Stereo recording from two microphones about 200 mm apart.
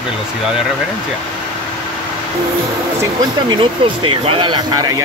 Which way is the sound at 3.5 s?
25° right (ahead or behind).